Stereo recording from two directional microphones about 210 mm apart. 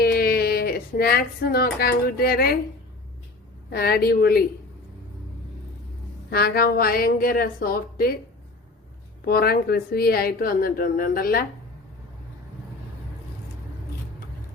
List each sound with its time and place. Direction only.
0.0 s speech: 45° left (ahead or behind)
3.7 s speech: 45° left (ahead or behind)
6.3 s speech: 45° left (ahead or behind)
9.2 s speech: 45° left (ahead or behind)